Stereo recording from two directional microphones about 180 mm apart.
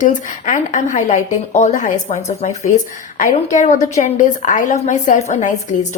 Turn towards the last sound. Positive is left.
turn(degrees=45)  # may be behind; listen again after turning